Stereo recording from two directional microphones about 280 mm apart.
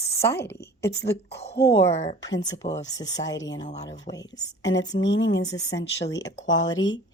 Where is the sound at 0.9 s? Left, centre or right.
Left.